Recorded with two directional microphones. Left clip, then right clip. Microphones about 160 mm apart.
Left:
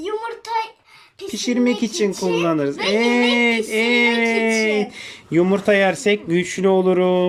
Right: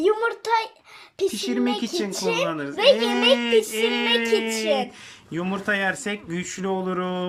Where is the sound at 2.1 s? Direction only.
65° right (ahead or behind).